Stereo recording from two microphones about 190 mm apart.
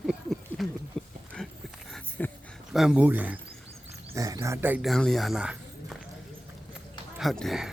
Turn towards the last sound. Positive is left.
turn(degrees=0)  # may be behind; listen again after turning